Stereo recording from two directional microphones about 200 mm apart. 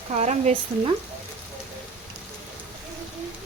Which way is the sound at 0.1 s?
35° right (ahead or behind).